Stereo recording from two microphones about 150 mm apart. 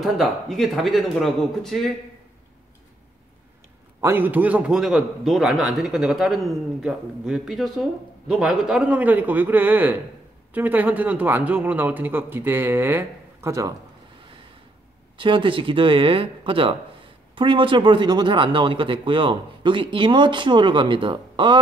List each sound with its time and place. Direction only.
0.0 s a man's voice: centre (ahead or behind)
4.0 s a man's voice: 15° right (ahead or behind)
15.1 s a man's voice: 35° right (ahead or behind)